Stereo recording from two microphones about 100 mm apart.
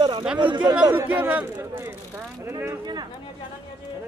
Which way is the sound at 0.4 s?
50° right (ahead or behind).